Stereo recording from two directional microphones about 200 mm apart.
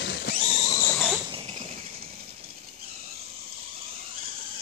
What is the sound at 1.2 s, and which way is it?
Rodents, 25° right (ahead or behind).